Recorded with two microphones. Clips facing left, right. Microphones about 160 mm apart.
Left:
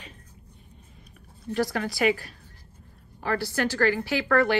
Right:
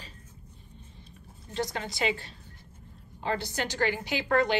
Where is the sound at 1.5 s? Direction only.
20° right (ahead or behind).